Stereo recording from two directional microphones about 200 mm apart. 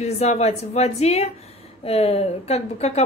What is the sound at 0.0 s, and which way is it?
Speech, 35° left (ahead or behind).